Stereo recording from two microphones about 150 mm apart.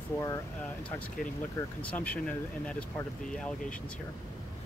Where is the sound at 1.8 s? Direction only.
10° left (ahead or behind).